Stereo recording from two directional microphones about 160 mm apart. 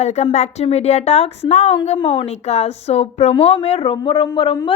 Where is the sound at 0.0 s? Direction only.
45° left (ahead or behind).